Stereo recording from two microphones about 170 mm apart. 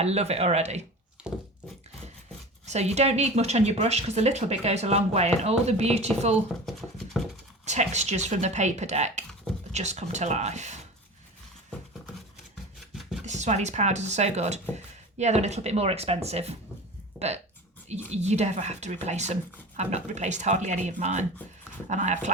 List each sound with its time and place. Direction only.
0.0 s speech: 40° right (ahead or behind)
1.2 s a sound: 5° right (ahead or behind)
2.6 s speech: 40° right (ahead or behind)
6.7 s a sound: centre (ahead or behind)
7.6 s speech: 45° right (ahead or behind)
12.9 s chopping: centre (ahead or behind)
13.2 s speech: 45° right (ahead or behind)